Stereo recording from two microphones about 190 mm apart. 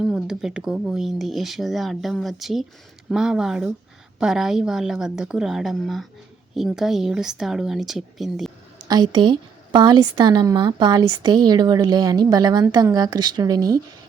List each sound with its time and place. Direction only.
0.0 s speech: 5° right (ahead or behind)
8.8 s a woman's voice: 20° right (ahead or behind)